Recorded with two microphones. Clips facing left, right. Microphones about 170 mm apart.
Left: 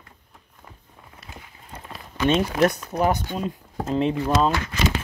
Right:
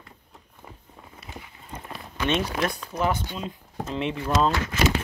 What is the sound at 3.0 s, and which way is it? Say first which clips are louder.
Speech: left 4 dB; 40° left (ahead or behind).